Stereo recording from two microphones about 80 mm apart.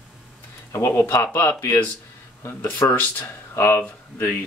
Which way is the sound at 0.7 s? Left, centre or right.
Left.